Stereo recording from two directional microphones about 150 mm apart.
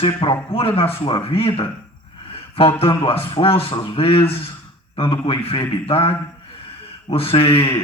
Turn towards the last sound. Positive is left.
turn(degrees=40)  # may be behind; listen again after turning